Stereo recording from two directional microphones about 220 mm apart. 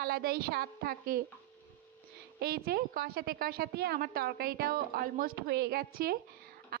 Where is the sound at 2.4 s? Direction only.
45° right (ahead or behind).